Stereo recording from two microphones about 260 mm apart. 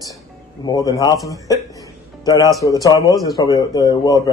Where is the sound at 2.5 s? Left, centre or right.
Centre.